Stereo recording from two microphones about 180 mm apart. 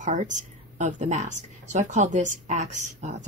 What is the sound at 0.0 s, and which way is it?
Speech, 45° right (ahead or behind).